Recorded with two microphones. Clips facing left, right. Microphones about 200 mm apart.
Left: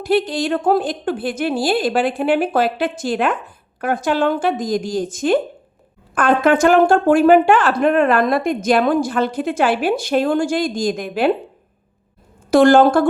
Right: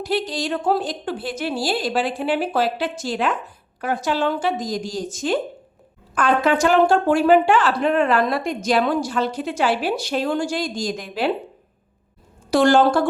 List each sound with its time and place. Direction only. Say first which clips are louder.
0.0 s a woman's voice: left 6 dB; 55° left (ahead or behind)
12.5 s speech: left 5 dB; 55° left (ahead or behind)